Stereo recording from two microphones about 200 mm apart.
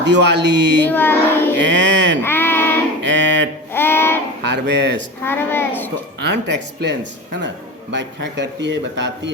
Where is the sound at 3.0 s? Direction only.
65° right (ahead or behind).